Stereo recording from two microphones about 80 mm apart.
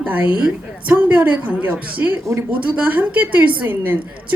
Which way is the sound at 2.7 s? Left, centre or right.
Centre.